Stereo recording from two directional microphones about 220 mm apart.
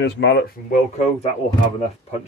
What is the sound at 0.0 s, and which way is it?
Speech, 50° left (ahead or behind).